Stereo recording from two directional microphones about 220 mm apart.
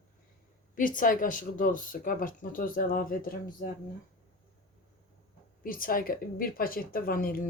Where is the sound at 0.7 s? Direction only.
40° left (ahead or behind).